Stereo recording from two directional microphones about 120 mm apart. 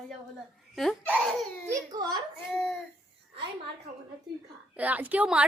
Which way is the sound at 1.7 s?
35° right (ahead or behind).